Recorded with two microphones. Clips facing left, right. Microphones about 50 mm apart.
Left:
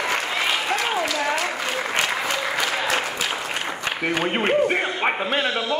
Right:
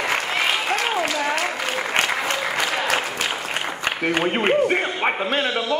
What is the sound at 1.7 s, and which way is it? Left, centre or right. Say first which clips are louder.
Applause: right 1 dB; centre.